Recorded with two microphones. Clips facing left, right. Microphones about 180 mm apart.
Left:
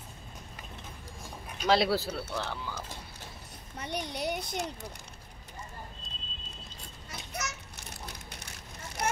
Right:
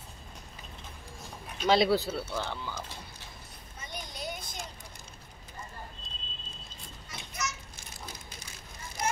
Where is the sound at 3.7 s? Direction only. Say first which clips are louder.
Left 7 dB; 70° left (ahead or behind).